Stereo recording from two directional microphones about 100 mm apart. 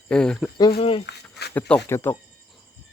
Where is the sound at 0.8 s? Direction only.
60° left (ahead or behind).